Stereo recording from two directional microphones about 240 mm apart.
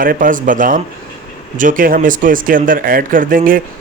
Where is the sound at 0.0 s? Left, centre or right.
Right.